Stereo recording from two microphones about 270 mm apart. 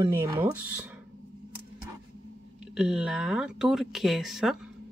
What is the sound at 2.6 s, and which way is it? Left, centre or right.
Speech, centre.